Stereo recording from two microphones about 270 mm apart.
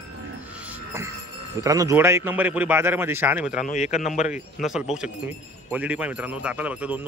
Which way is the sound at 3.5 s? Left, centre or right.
Left.